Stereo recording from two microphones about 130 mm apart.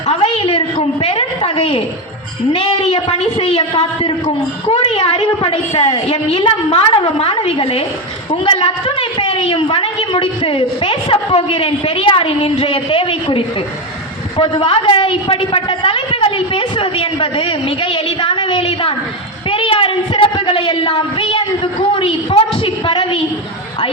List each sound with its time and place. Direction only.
0.1 s a sound: 50° left (ahead or behind)
2.6 s a woman's voice: 40° left (ahead or behind)
2.9 s a woman's voice: 55° left (ahead or behind)
4.7 s a woman's voice: 55° left (ahead or behind); by 23.2 s 40° left (ahead or behind)